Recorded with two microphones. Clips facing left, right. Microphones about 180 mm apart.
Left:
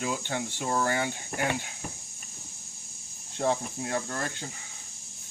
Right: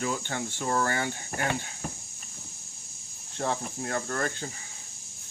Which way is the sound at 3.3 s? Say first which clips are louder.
Left 3 dB; 15° left (ahead or behind).